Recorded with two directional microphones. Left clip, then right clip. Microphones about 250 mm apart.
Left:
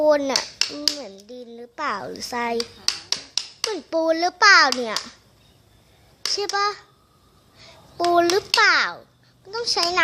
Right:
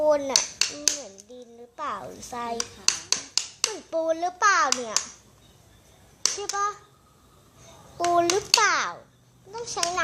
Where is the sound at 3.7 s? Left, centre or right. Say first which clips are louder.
Left 7 dB; left.